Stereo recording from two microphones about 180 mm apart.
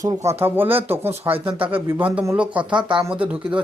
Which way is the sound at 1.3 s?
30° right (ahead or behind).